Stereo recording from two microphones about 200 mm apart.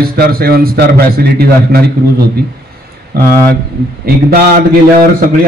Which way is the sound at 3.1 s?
50° right (ahead or behind).